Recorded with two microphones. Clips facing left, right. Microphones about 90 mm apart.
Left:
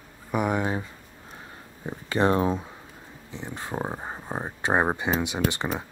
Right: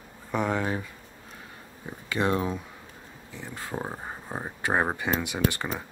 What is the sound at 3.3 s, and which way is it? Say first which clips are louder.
Speech: left 3 dB; 20° left (ahead or behind).